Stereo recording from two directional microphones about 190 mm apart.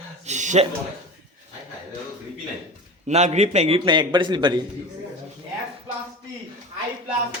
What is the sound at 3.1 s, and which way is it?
A man's voice, 35° right (ahead or behind).